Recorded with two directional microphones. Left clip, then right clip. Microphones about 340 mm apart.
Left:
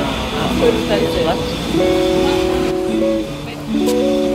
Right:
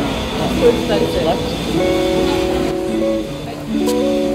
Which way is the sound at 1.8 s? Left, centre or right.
Centre.